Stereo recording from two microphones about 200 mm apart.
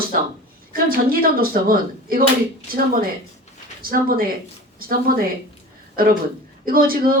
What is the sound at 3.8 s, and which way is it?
A woman's voice, 45° right (ahead or behind).